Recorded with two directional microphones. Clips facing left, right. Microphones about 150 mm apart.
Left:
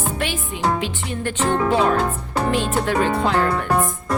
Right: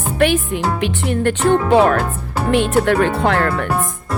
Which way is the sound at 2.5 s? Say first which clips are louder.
Right 7 dB; 60° right (ahead or behind).